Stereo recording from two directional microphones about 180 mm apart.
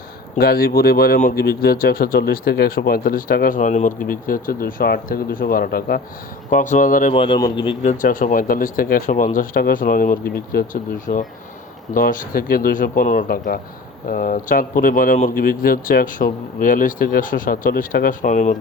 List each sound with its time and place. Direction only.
0.3 s speech: 55° left (ahead or behind)
7.1 s a man's voice: 30° left (ahead or behind)
7.9 s speech: 50° left (ahead or behind)